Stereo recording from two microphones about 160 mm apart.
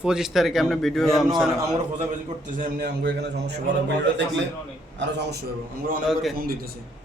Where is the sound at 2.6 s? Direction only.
75° right (ahead or behind).